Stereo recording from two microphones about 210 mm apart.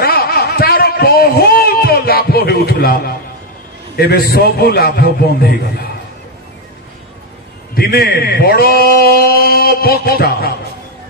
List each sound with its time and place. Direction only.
0.0 s a sound: 45° left (ahead or behind)
3.9 s a man's voice: 50° left (ahead or behind)
7.7 s a man's voice: 45° left (ahead or behind)